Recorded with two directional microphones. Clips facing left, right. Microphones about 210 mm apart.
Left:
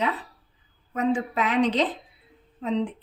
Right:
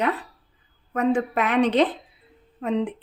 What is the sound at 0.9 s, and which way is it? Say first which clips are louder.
A woman's voice: right 3 dB; 55° right (ahead or behind).